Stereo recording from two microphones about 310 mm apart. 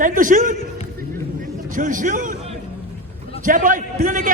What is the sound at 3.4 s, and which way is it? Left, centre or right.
Speech, right.